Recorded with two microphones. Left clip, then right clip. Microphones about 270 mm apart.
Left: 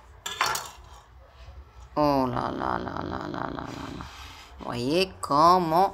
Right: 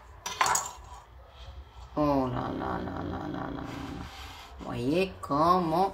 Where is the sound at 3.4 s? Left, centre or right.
Left.